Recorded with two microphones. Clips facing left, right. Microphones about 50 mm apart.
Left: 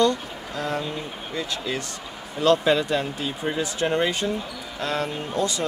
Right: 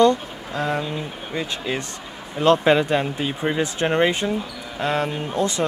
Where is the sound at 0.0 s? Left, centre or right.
Right.